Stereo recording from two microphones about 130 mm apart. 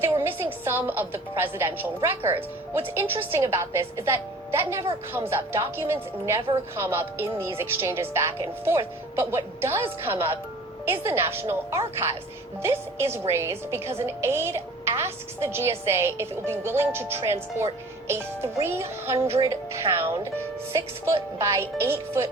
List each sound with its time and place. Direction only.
0.0 s a woman's voice: 20° right (ahead or behind)